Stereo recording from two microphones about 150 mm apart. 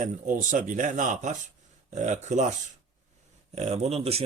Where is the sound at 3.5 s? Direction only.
45° right (ahead or behind).